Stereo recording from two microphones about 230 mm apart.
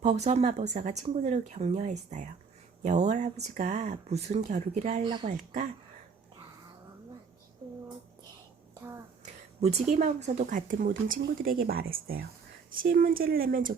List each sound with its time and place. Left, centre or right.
0.0 s speech: right
9.2 s a sound: right
9.9 s speech: right